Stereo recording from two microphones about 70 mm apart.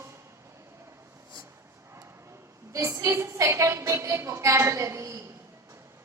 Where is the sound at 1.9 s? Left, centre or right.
Right.